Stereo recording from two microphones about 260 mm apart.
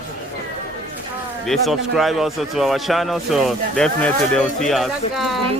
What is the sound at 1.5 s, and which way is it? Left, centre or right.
Speech, centre.